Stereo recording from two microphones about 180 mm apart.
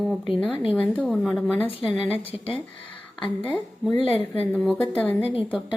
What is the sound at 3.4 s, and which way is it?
Speech, 5° left (ahead or behind).